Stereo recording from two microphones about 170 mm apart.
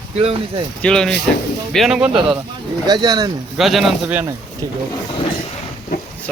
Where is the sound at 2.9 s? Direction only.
25° right (ahead or behind).